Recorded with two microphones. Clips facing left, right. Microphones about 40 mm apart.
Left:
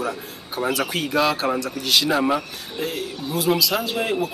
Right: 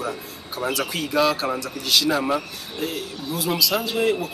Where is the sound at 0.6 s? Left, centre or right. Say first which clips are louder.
Left 2 dB; centre.